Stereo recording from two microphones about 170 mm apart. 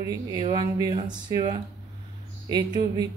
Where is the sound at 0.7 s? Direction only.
25° right (ahead or behind).